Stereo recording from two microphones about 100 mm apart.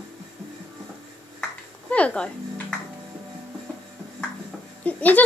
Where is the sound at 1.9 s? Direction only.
10° left (ahead or behind).